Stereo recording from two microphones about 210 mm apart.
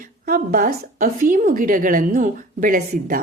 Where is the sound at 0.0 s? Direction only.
40° right (ahead or behind).